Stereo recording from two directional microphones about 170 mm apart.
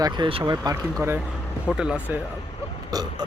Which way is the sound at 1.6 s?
5° right (ahead or behind).